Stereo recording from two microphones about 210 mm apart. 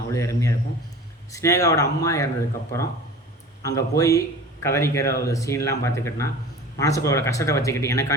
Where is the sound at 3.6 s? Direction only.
15° left (ahead or behind).